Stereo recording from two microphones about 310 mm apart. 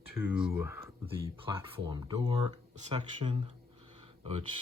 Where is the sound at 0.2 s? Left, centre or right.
Centre.